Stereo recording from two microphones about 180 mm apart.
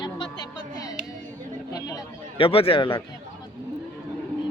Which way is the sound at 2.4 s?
30° left (ahead or behind).